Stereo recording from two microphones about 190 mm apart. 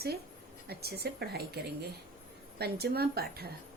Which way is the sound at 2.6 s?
55° right (ahead or behind).